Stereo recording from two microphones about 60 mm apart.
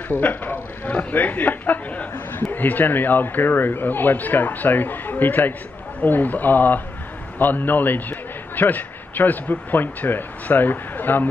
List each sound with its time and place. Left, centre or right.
0.2 s a man's voice: left